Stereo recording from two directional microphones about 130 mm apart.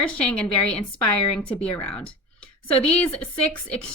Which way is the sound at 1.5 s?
50° left (ahead or behind).